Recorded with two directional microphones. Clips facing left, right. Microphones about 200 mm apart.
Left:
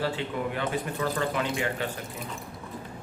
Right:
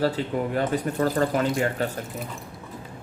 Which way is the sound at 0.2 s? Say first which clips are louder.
Right 5 dB; 40° right (ahead or behind).